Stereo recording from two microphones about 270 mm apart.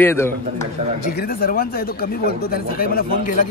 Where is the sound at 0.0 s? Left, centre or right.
Centre.